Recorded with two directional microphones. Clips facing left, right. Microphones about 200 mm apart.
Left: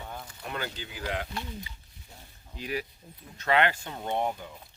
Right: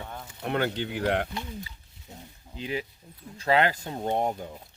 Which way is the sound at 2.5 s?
25° right (ahead or behind).